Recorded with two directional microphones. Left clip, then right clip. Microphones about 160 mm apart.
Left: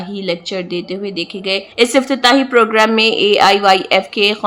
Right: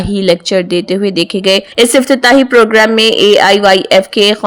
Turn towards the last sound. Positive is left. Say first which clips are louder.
# right 5 dB
turn(degrees=-30)  # may be behind; listen again after turning